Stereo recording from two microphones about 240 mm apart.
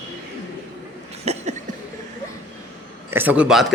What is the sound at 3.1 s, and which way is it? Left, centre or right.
Speech, centre.